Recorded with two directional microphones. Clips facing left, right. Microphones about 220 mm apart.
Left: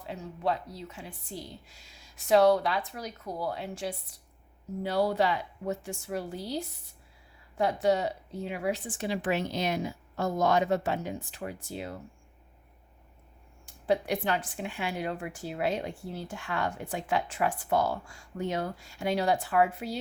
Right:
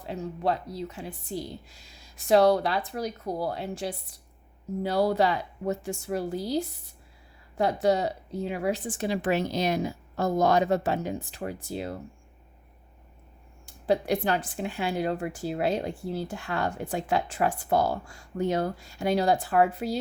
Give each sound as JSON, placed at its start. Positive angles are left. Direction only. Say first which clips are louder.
{"t": 0.0, "sound": "speech", "louder": "right 3 dB", "side_deg": -40}
{"t": 13.7, "sound": "speech", "louder": "right 3 dB", "side_deg": -35}